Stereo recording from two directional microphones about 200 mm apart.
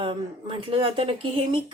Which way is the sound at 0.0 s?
25° right (ahead or behind).